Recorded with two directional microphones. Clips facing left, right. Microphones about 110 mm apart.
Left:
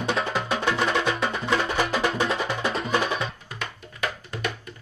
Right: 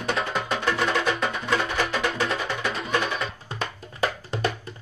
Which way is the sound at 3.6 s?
30° right (ahead or behind).